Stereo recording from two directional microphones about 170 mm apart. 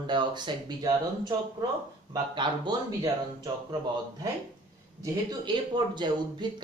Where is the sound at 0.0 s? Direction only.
25° right (ahead or behind).